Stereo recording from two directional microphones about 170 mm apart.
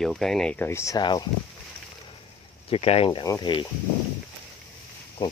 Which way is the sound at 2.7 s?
35° left (ahead or behind).